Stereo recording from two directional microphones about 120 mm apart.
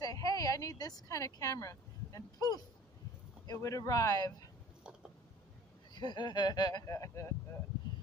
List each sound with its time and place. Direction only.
0.0 s speech: 30° left (ahead or behind)
5.9 s speech: 40° left (ahead or behind)